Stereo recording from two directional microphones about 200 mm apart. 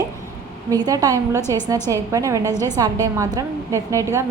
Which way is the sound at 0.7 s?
15° right (ahead or behind).